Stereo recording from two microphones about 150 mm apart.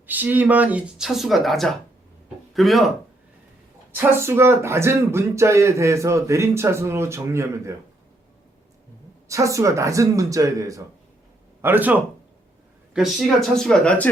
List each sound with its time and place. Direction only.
0.1 s speech: 10° right (ahead or behind)
3.9 s speech: 15° right (ahead or behind)
9.3 s speech: 20° right (ahead or behind); by 14.1 s 10° left (ahead or behind)